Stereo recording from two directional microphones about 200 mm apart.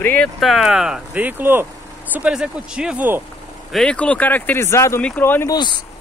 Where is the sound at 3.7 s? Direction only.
5° left (ahead or behind).